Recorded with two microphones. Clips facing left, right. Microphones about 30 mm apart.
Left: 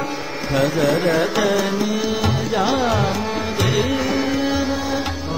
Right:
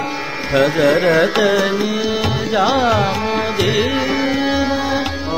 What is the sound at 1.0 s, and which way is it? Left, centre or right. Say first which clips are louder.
Music: right 4 dB; right.